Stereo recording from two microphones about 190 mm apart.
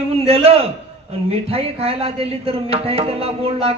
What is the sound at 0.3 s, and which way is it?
Speech, 30° right (ahead or behind).